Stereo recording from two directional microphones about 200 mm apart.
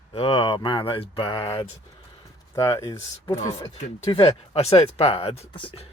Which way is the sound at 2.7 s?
15° left (ahead or behind).